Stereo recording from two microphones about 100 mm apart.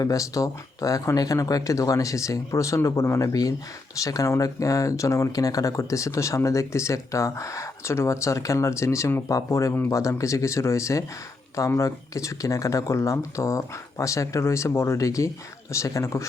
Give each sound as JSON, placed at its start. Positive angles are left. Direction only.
{"t": 0.0, "sound": "speech", "side_deg": 35}